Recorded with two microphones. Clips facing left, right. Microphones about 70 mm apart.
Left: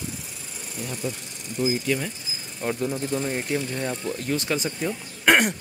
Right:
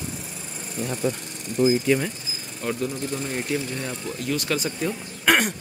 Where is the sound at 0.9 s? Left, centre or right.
Right.